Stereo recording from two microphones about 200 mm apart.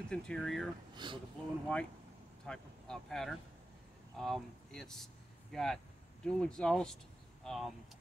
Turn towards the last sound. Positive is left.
turn(degrees=0)  # may be behind; listen again after turning